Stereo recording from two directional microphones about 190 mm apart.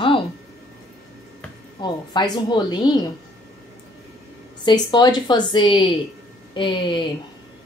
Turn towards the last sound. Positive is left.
turn(degrees=25)  # may be behind; listen again after turning